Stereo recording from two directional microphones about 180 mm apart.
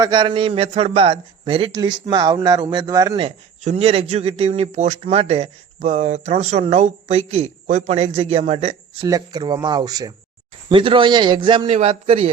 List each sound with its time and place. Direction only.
0.0 s a man's voice: 25° right (ahead or behind)
9.0 s a man's voice: 20° right (ahead or behind)